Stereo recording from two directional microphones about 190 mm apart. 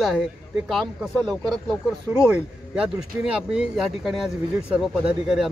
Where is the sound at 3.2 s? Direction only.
5° right (ahead or behind).